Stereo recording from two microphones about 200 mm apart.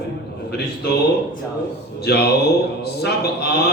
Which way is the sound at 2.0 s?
55° left (ahead or behind).